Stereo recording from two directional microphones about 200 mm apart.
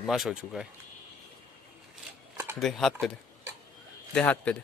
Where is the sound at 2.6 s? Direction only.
Centre (ahead or behind).